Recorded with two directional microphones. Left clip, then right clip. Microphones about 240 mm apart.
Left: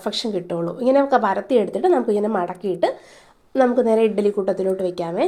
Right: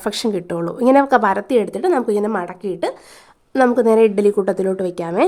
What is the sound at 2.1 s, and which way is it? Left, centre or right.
Speech, centre.